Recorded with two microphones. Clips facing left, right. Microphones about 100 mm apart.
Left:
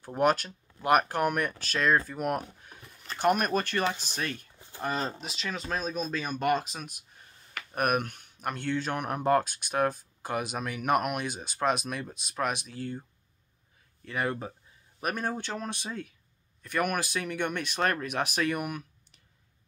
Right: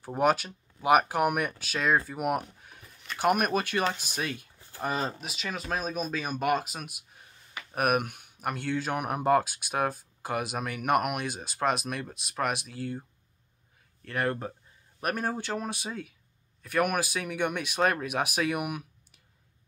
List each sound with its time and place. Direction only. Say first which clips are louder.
0.0 s speech: even; 5° right (ahead or behind)
4.6 s a sound: even; 20° left (ahead or behind)
4.8 s speech: right 1 dB; 5° right (ahead or behind)
14.0 s speech: right 1 dB; centre (ahead or behind)